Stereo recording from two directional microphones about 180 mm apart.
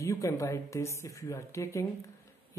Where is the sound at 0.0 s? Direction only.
15° left (ahead or behind).